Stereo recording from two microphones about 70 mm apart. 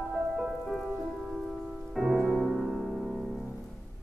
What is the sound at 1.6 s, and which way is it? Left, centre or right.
Music, centre.